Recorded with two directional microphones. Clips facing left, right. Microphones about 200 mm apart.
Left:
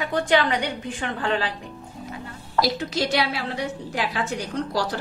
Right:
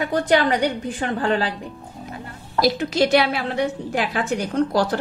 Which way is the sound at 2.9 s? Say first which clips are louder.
Right 7 dB; 55° right (ahead or behind).